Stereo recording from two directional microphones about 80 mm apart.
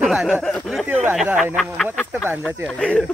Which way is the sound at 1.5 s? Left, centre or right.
Centre.